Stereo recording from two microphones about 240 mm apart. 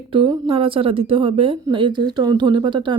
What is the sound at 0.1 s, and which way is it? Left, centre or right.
Speech, centre.